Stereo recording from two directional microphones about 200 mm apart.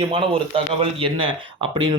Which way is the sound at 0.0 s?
25° right (ahead or behind).